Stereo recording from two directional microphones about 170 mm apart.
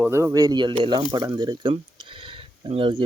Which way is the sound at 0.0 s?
10° right (ahead or behind).